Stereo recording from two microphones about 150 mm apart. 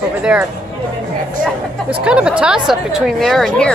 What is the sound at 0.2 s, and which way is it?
Speech, 5° right (ahead or behind).